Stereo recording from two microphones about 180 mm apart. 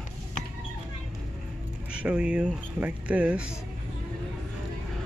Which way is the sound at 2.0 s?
5° right (ahead or behind).